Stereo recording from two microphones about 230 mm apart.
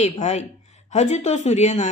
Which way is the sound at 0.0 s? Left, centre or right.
Left.